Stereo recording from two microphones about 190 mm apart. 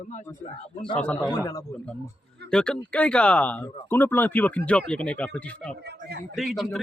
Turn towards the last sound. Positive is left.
turn(degrees=0)  # may be behind; listen again after turning